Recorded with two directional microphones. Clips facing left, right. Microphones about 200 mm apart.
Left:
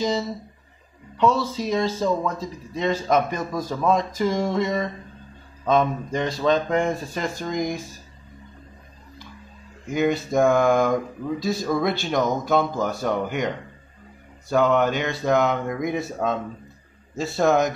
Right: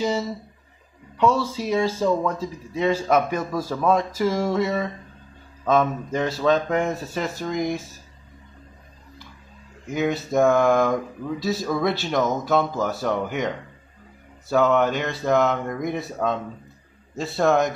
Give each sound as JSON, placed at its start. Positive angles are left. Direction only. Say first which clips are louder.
{"t": 1.1, "sound": "a man's voice", "louder": "even", "side_deg": -10}
{"t": 9.8, "sound": "speech", "louder": "left 2 dB", "side_deg": 0}
{"t": 14.5, "sound": "speech", "louder": "even", "side_deg": 0}